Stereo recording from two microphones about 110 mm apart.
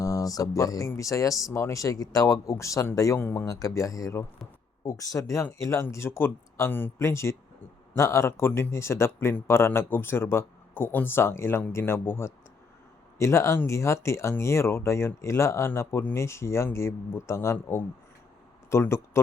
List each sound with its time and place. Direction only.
0.0 s speech: 30° left (ahead or behind)